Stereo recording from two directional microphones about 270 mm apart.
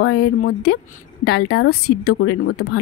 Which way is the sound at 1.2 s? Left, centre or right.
Left.